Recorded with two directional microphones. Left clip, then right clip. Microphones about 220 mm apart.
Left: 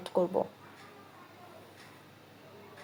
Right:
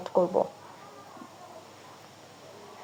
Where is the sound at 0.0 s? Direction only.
10° left (ahead or behind).